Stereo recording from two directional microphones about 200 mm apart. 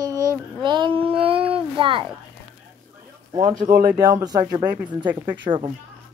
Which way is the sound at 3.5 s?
45° right (ahead or behind).